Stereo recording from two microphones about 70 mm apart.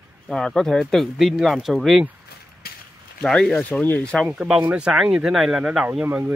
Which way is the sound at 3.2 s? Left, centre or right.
Centre.